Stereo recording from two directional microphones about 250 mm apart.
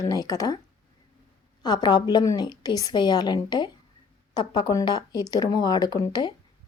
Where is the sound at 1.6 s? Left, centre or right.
Centre.